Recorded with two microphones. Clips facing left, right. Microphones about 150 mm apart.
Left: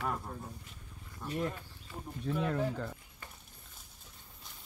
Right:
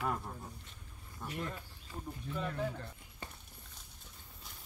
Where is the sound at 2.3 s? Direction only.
80° left.